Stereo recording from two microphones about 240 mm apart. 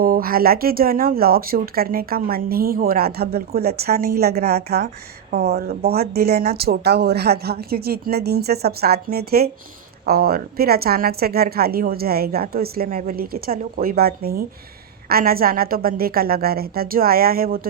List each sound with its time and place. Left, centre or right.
0.0 s a woman's voice: right